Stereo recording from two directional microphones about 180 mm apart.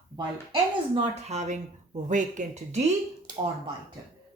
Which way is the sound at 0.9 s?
40° right (ahead or behind).